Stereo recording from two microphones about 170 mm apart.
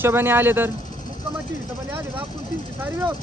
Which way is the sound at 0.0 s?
10° right (ahead or behind).